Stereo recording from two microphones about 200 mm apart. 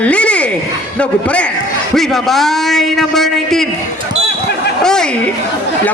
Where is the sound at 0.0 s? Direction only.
5° left (ahead or behind).